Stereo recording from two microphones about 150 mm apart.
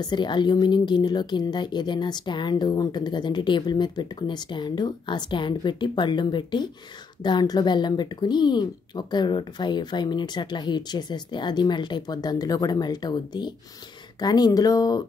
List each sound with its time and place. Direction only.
0.0 s speech: 30° left (ahead or behind)